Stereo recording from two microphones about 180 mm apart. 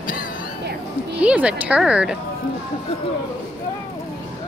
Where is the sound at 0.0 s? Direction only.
50° left (ahead or behind).